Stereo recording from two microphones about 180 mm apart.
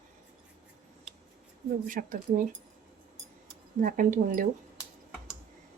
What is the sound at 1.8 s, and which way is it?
Speech, 50° right (ahead or behind).